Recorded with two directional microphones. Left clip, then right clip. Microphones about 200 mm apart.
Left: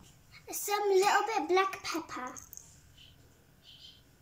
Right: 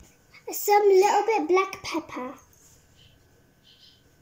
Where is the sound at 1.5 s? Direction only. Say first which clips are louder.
Right 5 dB; 20° left (ahead or behind).